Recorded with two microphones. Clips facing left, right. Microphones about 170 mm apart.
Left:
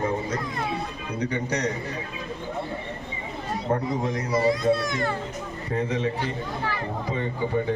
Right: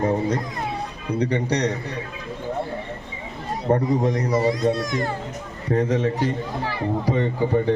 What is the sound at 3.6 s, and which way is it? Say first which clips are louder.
A man's voice: right 6 dB; 40° right (ahead or behind).